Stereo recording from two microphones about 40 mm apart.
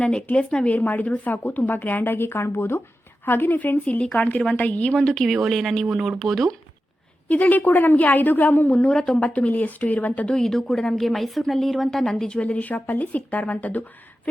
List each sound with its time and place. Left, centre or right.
0.0 s speech: left
0.6 s a woman's voice: left
3.2 s a woman's voice: left
4.2 s a woman's voice: left
4.9 s speech: centre
5.8 s speech: centre
6.1 s speech: centre
7.3 s a woman's voice: left
8.8 s speech: centre
9.1 s a woman's voice: left
10.2 s speech: centre
12.5 s a woman's voice: left